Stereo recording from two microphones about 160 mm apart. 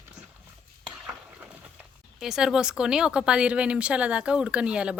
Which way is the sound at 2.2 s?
Centre (ahead or behind).